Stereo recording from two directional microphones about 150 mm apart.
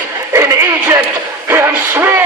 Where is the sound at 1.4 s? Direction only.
15° right (ahead or behind).